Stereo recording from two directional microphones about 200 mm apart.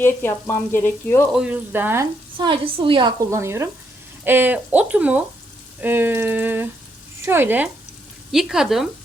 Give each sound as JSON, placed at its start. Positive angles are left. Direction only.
{"t": 0.0, "sound": "frying", "side_deg": 10}
{"t": 1.3, "sound": "speech", "side_deg": -5}
{"t": 2.4, "sound": "a woman's voice", "side_deg": -25}